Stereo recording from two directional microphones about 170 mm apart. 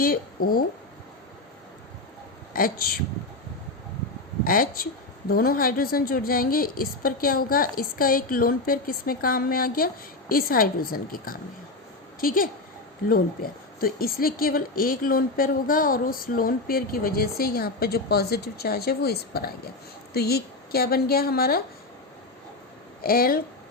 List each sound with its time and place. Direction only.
0.0 s speech: 60° left (ahead or behind)
2.5 s speech: 60° left (ahead or behind)
4.4 s speech: 60° left (ahead or behind)
23.0 s speech: 60° left (ahead or behind)